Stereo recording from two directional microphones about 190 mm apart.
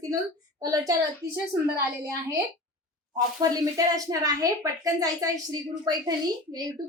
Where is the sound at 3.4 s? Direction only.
20° right (ahead or behind).